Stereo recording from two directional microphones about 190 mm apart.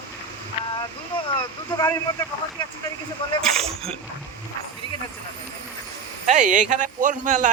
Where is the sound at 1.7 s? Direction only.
25° left (ahead or behind).